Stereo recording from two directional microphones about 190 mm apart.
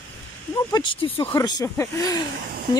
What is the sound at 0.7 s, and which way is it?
Speech, 25° left (ahead or behind).